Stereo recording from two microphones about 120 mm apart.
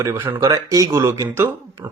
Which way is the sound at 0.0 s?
25° right (ahead or behind).